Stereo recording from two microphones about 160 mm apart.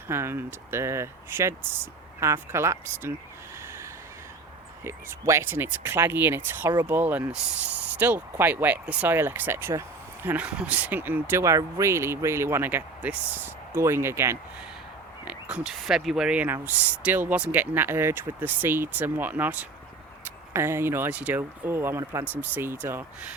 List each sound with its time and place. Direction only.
0.1 s speech: 15° right (ahead or behind)
4.8 s speech: 15° right (ahead or behind)